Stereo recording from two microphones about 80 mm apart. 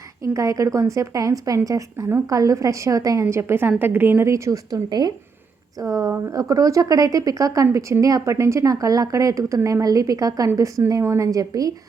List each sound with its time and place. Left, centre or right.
0.2 s a woman's voice: right
5.8 s a woman's voice: right